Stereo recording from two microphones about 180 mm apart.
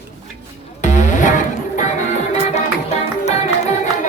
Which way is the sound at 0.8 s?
45° left (ahead or behind).